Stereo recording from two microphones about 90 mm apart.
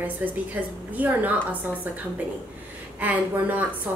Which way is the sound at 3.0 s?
20° right (ahead or behind).